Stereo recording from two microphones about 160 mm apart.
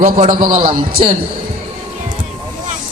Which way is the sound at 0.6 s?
35° right (ahead or behind).